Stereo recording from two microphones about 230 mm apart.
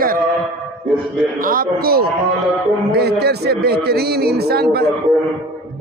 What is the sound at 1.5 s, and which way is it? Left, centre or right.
A man's voice, right.